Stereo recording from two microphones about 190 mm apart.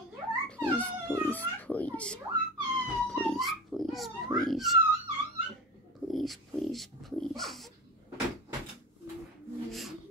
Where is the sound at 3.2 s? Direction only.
Centre (ahead or behind).